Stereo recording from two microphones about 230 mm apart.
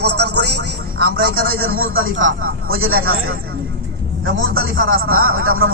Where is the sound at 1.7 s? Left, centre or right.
Right.